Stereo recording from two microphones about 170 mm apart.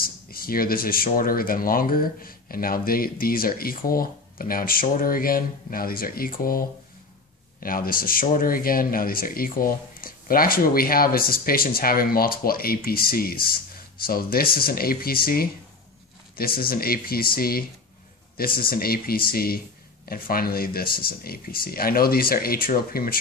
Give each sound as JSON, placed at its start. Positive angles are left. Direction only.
{"t": 0.0, "sound": "speech", "side_deg": 60}
{"t": 7.6, "sound": "speech", "side_deg": 55}